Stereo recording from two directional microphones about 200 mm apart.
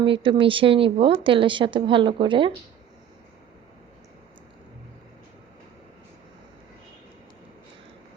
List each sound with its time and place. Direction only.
0.0 s speech: 25° right (ahead or behind)